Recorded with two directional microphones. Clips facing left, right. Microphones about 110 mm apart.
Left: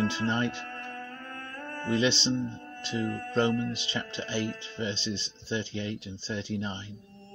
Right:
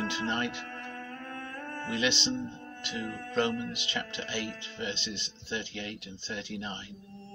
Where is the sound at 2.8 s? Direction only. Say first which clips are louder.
Left 6 dB; 30° left (ahead or behind).